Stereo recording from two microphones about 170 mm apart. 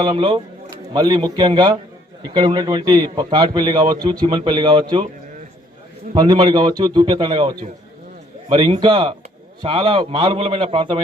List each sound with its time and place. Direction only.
0.0 s a man's voice: 30° right (ahead or behind)
6.1 s a man's voice: 25° right (ahead or behind)
8.8 s a man's voice: 30° right (ahead or behind)